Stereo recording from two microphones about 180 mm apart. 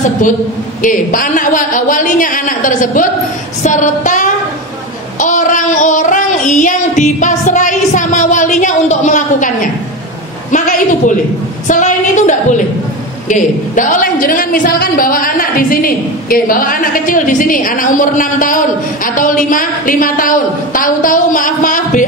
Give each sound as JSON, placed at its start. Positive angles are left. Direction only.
{"t": 0.8, "sound": "a woman's voice", "side_deg": 50}